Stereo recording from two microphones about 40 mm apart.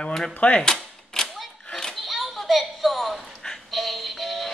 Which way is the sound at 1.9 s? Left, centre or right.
Centre.